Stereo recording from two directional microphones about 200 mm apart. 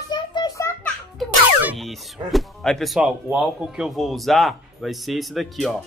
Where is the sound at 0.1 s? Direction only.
20° left (ahead or behind).